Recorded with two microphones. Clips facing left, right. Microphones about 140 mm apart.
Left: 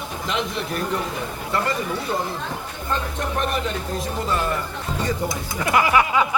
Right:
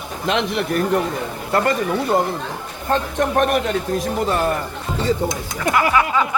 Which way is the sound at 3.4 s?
60° right (ahead or behind).